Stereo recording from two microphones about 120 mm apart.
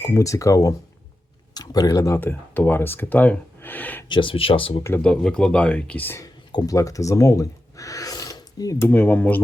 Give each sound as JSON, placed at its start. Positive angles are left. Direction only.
{"t": 0.2, "sound": "speech", "side_deg": 25}
{"t": 4.1, "sound": "speech", "side_deg": 45}
{"t": 5.0, "sound": "speech", "side_deg": 5}
{"t": 6.1, "sound": "speech", "side_deg": 30}
{"t": 8.9, "sound": "speech", "side_deg": 15}